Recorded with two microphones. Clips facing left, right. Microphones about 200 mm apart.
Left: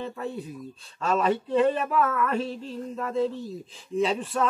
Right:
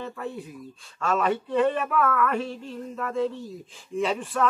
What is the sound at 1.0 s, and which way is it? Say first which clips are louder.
Speech: left 1 dB; 35° left (ahead or behind).